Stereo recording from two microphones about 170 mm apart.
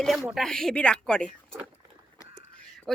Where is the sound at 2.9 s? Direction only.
5° left (ahead or behind).